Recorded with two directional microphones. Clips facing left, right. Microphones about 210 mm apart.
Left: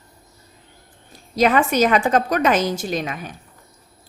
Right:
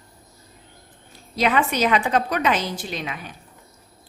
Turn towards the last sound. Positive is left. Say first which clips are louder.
# left 6 dB
turn(degrees=45)  # may be behind; listen again after turning